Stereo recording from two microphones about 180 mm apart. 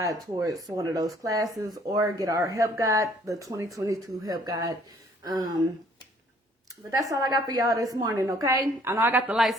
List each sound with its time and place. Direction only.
0.0 s a woman's voice: 20° right (ahead or behind)
6.9 s a woman's voice: 20° right (ahead or behind)